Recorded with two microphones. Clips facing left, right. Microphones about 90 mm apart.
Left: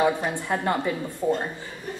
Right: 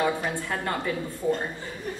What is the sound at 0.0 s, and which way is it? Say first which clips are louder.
Speech: left 3 dB; 15° left (ahead or behind).